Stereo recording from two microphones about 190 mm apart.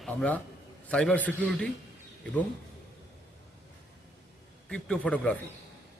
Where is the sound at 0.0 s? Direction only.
Centre (ahead or behind).